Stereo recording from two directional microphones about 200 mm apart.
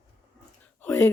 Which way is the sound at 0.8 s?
10° left (ahead or behind).